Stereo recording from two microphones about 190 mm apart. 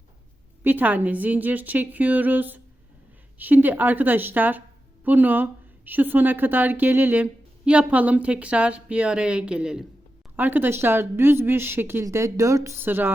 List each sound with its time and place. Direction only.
0.6 s speech: 10° right (ahead or behind)